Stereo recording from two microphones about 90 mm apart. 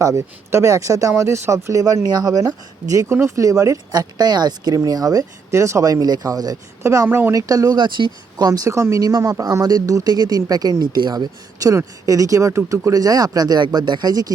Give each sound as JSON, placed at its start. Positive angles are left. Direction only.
{"t": 0.0, "sound": "speech", "side_deg": -35}
{"t": 6.8, "sound": "speech", "side_deg": -30}
{"t": 7.8, "sound": "speech", "side_deg": -60}